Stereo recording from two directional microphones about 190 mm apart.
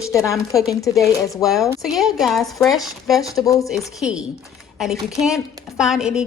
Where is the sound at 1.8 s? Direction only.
Centre (ahead or behind).